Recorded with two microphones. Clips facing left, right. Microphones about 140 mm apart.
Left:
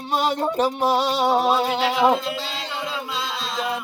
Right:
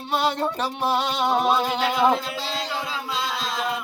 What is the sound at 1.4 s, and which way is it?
Music, 5° left (ahead or behind).